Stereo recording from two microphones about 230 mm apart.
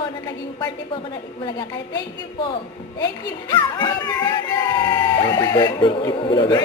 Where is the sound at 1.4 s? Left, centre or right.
Centre.